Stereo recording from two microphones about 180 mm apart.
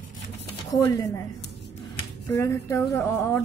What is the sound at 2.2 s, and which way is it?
Speech, 15° left (ahead or behind).